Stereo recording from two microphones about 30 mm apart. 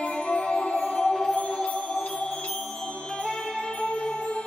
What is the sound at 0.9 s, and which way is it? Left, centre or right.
Music, centre.